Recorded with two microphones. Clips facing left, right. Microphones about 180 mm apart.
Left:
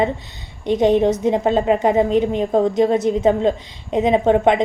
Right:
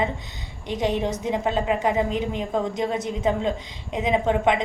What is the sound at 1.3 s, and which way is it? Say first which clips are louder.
A woman's voice: left 7 dB; 35° left (ahead or behind).